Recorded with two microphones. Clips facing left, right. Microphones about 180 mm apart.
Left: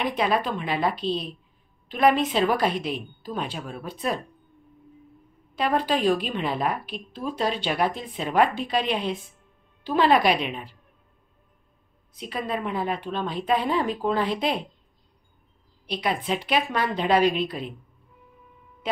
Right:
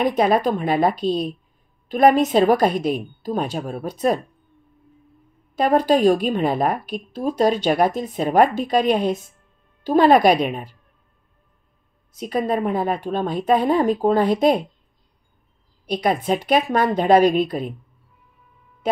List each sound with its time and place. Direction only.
0.0 s a woman's voice: 45° right (ahead or behind)
5.6 s a woman's voice: 45° right (ahead or behind)
12.1 s a woman's voice: 45° right (ahead or behind)
15.9 s a woman's voice: 45° right (ahead or behind)